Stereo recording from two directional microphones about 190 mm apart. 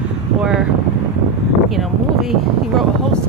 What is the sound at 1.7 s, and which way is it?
Speech, centre (ahead or behind).